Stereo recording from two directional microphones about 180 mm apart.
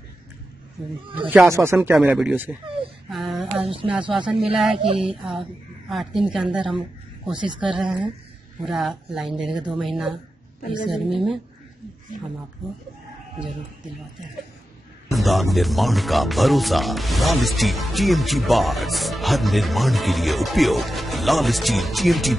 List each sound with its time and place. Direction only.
0.8 s speech: centre (ahead or behind)
1.5 s speech: 15° right (ahead or behind)
3.1 s a sound: centre (ahead or behind)
4.0 s speech: 25° right (ahead or behind)
4.5 s speech: centre (ahead or behind)
4.7 s speech: 30° right (ahead or behind)
5.0 s speech: 5° right (ahead or behind)
7.3 s speech: 25° right (ahead or behind)
7.6 s speech: 5° right (ahead or behind)
15.1 s speech: centre (ahead or behind)